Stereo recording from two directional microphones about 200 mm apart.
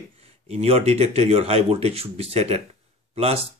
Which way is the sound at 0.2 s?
30° right (ahead or behind).